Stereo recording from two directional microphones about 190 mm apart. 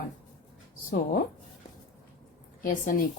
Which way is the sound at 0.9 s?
45° left (ahead or behind).